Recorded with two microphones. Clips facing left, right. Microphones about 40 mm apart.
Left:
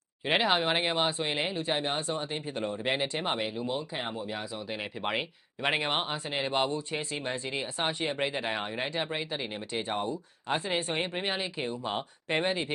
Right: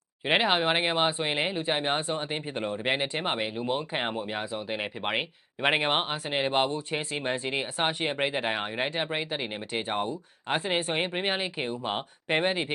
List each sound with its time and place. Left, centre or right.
0.3 s speech: centre
3.8 s speech: right